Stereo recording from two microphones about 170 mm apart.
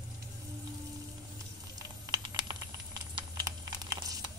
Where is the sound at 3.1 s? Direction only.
25° right (ahead or behind).